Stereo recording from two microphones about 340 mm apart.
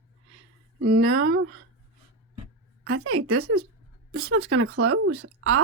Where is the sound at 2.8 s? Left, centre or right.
Right.